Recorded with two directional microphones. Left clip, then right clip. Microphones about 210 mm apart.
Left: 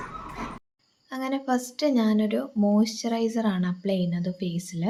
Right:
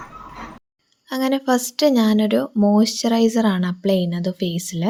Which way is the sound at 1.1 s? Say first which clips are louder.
Right 8 dB; 40° right (ahead or behind).